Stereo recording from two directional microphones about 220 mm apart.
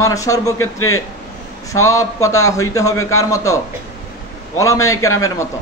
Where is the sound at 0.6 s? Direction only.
70° left (ahead or behind).